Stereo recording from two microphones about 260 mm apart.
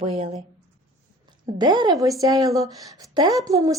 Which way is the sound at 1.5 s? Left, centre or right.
Centre.